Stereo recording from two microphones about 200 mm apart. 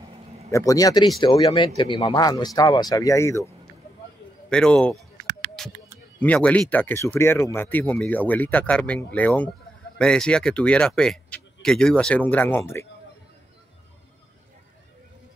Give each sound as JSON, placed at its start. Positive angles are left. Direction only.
{"t": 0.5, "sound": "speech", "side_deg": 15}
{"t": 4.5, "sound": "speech", "side_deg": 5}
{"t": 5.6, "sound": "a sound", "side_deg": 0}
{"t": 6.1, "sound": "speech", "side_deg": 5}